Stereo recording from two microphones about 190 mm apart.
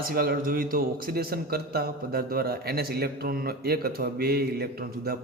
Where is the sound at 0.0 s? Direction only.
50° right (ahead or behind).